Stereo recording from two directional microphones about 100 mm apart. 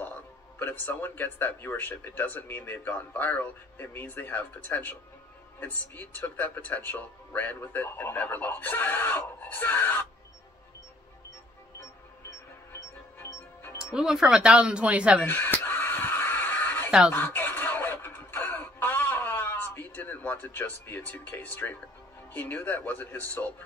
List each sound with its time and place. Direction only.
0.6 s a man's voice: 20° left (ahead or behind)
13.2 s music: 20° left (ahead or behind)
13.8 s speech: 5° right (ahead or behind)
15.2 s a sound: 20° left (ahead or behind)
22.3 s speech: 15° left (ahead or behind)